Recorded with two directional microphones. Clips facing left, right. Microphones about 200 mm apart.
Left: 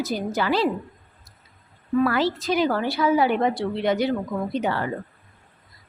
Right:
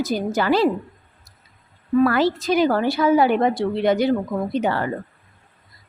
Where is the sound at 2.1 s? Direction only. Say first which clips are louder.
Right 3 dB; 50° right (ahead or behind).